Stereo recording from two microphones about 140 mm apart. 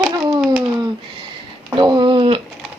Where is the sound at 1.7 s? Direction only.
35° right (ahead or behind).